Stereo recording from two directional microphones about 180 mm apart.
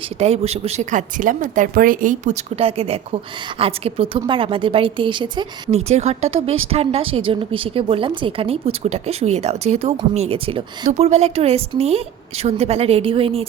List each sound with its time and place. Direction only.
0.2 s a woman's voice: 35° right (ahead or behind)
2.6 s a woman's voice: 35° right (ahead or behind)
5.7 s speech: 35° right (ahead or behind)